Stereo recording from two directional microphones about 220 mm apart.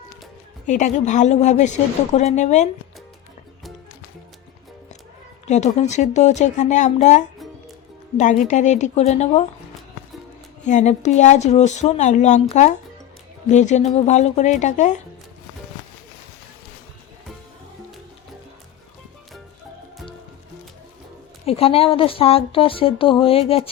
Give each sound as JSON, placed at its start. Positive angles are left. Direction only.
{"t": 0.7, "sound": "speech", "side_deg": 35}
{"t": 5.5, "sound": "speech", "side_deg": 30}
{"t": 10.6, "sound": "speech", "side_deg": 35}
{"t": 21.4, "sound": "a woman's voice", "side_deg": 25}